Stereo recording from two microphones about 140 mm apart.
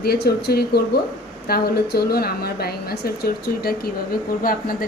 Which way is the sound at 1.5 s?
90° left.